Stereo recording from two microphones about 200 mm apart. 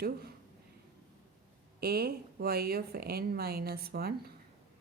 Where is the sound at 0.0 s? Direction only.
50° right (ahead or behind).